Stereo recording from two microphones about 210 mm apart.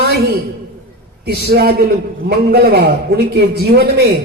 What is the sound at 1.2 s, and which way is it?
Speech, 50° right (ahead or behind).